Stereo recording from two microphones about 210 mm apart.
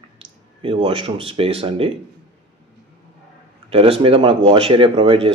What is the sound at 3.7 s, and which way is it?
Speech, 25° right (ahead or behind).